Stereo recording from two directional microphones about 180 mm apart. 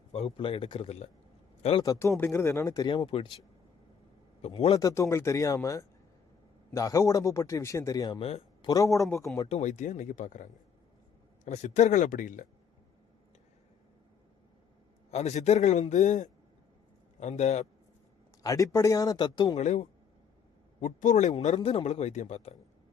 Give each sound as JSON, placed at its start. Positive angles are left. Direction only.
{"t": 0.1, "sound": "speech", "side_deg": 35}
{"t": 1.6, "sound": "speech", "side_deg": 25}
{"t": 4.8, "sound": "a man's voice", "side_deg": 20}
{"t": 8.2, "sound": "speech", "side_deg": 35}
{"t": 8.7, "sound": "a man's voice", "side_deg": 15}
{"t": 9.5, "sound": "speech", "side_deg": 40}
{"t": 15.1, "sound": "speech", "side_deg": 40}
{"t": 18.4, "sound": "speech", "side_deg": 20}
{"t": 19.5, "sound": "speech", "side_deg": 40}